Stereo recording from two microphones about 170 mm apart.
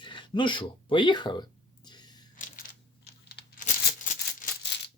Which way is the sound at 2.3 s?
50° left (ahead or behind).